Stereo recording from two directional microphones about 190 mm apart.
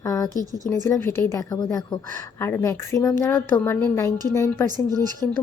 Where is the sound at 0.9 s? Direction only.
10° left (ahead or behind).